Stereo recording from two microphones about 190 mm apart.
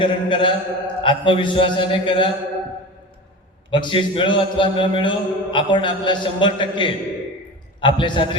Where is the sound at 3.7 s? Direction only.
25° left (ahead or behind).